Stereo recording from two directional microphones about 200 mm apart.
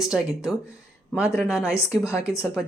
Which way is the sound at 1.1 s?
15° left (ahead or behind).